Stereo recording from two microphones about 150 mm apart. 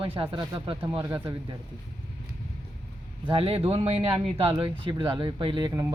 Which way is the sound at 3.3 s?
40° right (ahead or behind).